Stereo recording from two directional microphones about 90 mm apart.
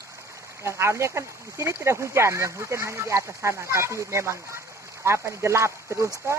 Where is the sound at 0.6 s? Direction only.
30° right (ahead or behind).